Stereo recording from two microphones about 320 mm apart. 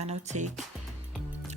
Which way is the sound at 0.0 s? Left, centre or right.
Right.